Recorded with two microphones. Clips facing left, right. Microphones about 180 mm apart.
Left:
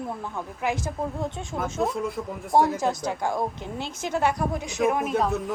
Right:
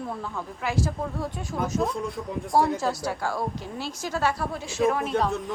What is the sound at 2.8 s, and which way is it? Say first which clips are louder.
A woman's voice: left 1 dB; 20° left (ahead or behind).